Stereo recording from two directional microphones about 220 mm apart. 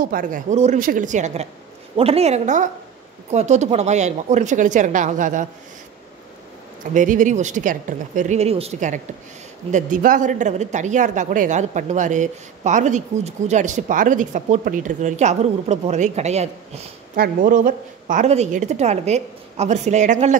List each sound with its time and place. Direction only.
0.0 s a woman's voice: 40° right (ahead or behind)
6.9 s a woman's voice: 35° right (ahead or behind)